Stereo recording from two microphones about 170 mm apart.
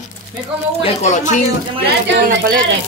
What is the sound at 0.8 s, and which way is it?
Speech, 45° left (ahead or behind).